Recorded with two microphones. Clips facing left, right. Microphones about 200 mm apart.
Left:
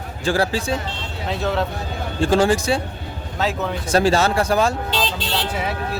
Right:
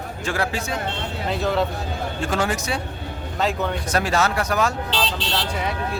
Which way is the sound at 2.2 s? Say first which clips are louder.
Left 8 dB; 30° left (ahead or behind).